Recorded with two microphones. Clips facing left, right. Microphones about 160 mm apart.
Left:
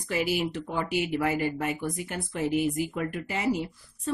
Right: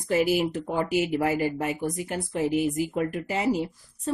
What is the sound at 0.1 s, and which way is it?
Speech, 45° right (ahead or behind).